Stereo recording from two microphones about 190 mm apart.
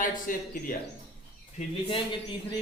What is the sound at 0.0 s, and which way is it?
Speech, 45° left (ahead or behind).